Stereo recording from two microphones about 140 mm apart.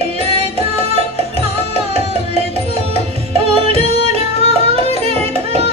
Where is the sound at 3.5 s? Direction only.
45° right (ahead or behind).